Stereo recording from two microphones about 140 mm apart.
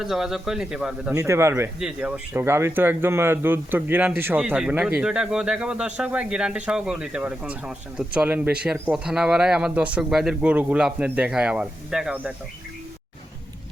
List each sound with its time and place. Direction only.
0.0 s speech: 5° right (ahead or behind)
1.1 s speech: 20° right (ahead or behind)
1.8 s speech: 5° right (ahead or behind)